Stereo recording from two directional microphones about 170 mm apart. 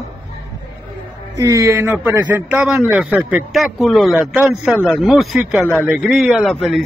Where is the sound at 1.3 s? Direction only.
20° right (ahead or behind).